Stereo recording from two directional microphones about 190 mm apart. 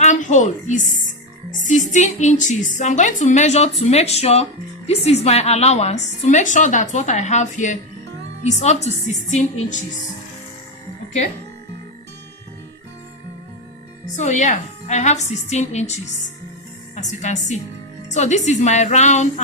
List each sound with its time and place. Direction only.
0.0 s a woman's voice: 40° left (ahead or behind)
14.2 s a woman's voice: 40° left (ahead or behind)